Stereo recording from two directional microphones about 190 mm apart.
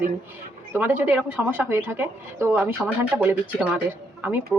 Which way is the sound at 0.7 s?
10° right (ahead or behind).